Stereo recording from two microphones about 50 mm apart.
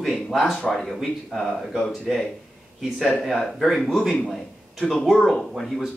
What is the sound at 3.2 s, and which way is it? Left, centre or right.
Speech, centre.